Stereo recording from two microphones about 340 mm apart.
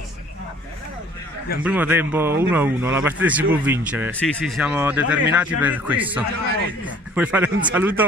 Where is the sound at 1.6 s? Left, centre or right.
Centre.